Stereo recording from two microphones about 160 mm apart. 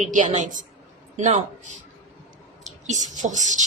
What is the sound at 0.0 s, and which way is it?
Speech, 50° right (ahead or behind).